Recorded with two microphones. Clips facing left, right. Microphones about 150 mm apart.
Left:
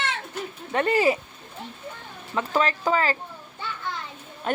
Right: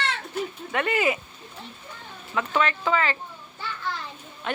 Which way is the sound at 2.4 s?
35° left (ahead or behind).